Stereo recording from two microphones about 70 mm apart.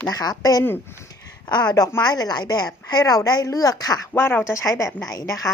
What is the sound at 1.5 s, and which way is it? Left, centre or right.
A woman's voice, left.